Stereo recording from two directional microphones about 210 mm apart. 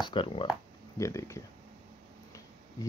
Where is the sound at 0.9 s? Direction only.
15° left (ahead or behind).